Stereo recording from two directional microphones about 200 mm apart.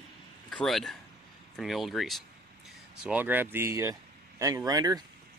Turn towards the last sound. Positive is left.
turn(degrees=-20)  # may be behind; listen again after turning